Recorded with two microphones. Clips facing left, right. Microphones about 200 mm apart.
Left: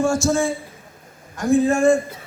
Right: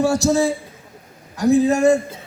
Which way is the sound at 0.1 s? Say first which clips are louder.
Right 2 dB; 40° right (ahead or behind).